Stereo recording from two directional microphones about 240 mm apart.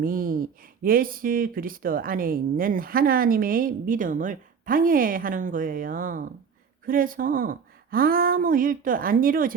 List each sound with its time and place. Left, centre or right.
0.0 s speech: right